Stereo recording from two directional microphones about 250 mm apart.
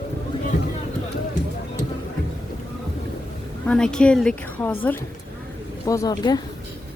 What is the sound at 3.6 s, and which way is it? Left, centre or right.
A woman's voice, centre.